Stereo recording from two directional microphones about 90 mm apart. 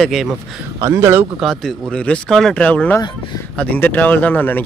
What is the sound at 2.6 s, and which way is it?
Speech, 15° left (ahead or behind).